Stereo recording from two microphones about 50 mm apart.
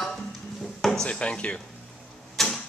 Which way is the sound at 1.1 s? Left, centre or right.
Left.